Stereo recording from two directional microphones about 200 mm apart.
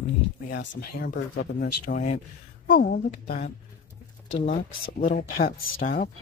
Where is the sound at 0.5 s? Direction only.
65° left (ahead or behind).